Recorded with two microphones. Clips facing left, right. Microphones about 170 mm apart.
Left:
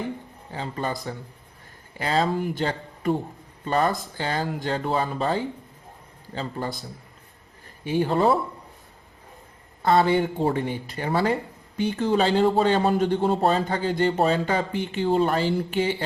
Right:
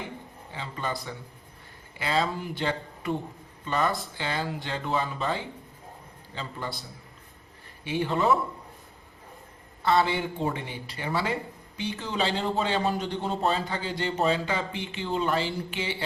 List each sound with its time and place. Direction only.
0.5 s a man's voice: 40° left (ahead or behind)
7.9 s a man's voice: 40° left (ahead or behind)
9.8 s speech: 45° left (ahead or behind)